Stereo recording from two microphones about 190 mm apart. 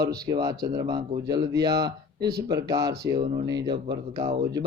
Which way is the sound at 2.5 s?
20° right (ahead or behind).